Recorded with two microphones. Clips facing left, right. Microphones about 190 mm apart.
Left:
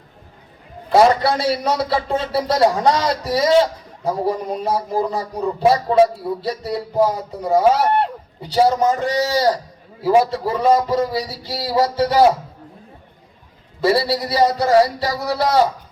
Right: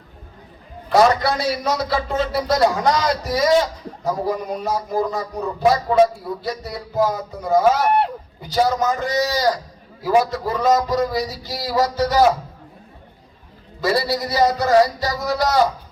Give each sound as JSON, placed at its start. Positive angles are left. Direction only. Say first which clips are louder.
{"t": 0.9, "sound": "a man's voice", "louder": "left 2 dB", "side_deg": 30}
{"t": 13.8, "sound": "a man's voice", "louder": "left 3 dB", "side_deg": 30}